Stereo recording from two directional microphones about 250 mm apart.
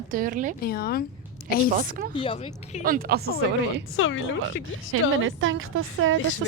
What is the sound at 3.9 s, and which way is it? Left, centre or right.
Speech, left.